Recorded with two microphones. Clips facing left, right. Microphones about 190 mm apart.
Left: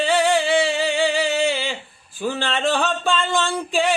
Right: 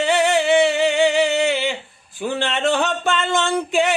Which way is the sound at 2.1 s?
20° right (ahead or behind).